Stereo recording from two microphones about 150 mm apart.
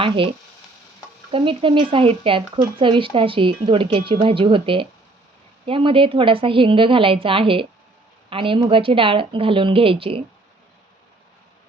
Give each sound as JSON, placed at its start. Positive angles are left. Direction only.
{"t": 0.0, "sound": "a woman's voice", "side_deg": -35}